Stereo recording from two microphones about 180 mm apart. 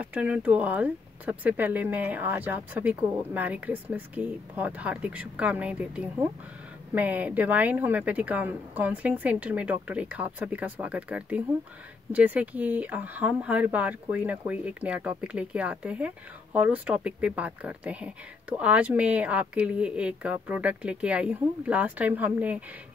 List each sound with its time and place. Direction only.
0.0 s speech: 5° right (ahead or behind)